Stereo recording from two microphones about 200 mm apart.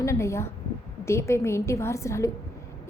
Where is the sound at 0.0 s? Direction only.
15° left (ahead or behind).